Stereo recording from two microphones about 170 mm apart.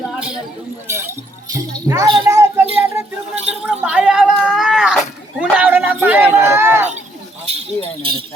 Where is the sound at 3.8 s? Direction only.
5° right (ahead or behind).